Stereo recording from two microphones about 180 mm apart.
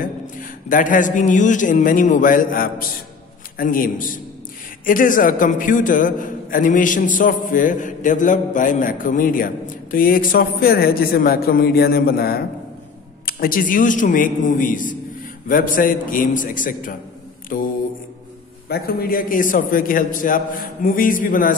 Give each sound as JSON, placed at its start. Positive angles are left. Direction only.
{"t": 0.0, "sound": "a man's voice", "side_deg": 50}
{"t": 18.7, "sound": "a man's voice", "side_deg": 55}